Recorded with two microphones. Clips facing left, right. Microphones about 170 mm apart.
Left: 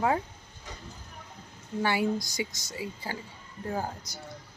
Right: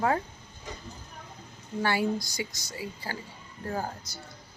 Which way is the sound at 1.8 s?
20° left (ahead or behind).